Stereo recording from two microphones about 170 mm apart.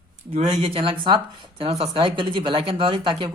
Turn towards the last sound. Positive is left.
turn(degrees=-30)  # may be behind; listen again after turning